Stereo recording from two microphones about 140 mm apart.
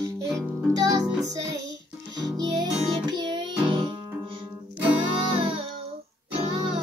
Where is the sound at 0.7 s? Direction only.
25° right (ahead or behind).